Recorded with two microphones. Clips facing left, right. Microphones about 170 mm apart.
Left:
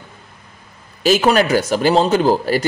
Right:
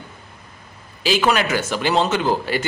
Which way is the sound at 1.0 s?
40° left (ahead or behind).